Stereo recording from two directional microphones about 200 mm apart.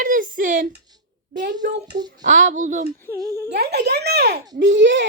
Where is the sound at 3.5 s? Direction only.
55° right (ahead or behind).